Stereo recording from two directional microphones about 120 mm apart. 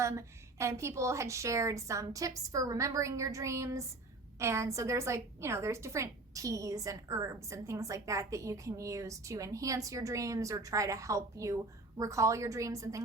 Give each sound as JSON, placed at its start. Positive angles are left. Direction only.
{"t": 0.0, "sound": "a woman's voice", "side_deg": -25}